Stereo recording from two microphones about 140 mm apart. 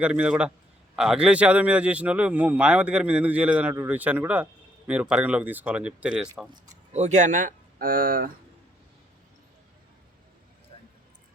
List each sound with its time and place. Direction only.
0.0 s speech: 10° right (ahead or behind)
6.9 s speech: 55° right (ahead or behind); by 8.3 s 90° right